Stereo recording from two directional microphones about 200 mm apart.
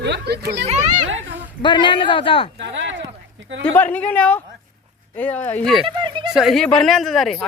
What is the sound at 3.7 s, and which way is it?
Speech, 10° left (ahead or behind).